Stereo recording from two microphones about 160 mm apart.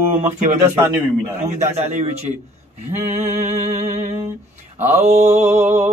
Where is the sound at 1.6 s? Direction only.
45° right (ahead or behind).